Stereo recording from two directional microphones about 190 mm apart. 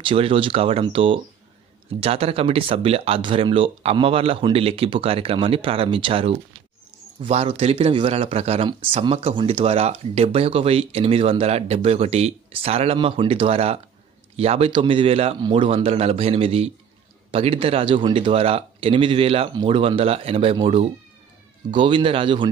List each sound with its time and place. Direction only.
0.0 s speech: 30° right (ahead or behind)